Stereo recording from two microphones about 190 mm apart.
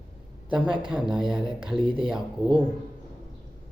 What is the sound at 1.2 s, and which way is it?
Mantra, 5° right (ahead or behind).